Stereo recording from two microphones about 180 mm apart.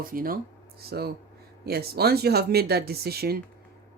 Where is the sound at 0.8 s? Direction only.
60° right (ahead or behind).